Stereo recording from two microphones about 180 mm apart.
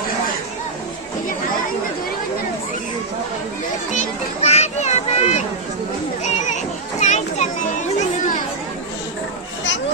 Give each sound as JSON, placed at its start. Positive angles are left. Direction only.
{"t": 3.9, "sound": "children playing", "side_deg": 35}